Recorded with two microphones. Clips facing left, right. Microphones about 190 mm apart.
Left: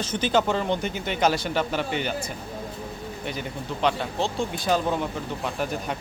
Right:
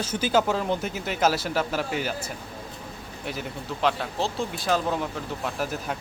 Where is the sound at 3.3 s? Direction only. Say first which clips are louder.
Even; centre (ahead or behind).